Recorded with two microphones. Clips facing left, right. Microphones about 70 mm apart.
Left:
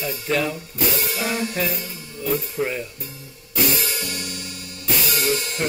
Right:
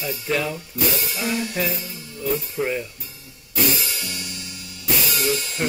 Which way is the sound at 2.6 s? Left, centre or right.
Centre.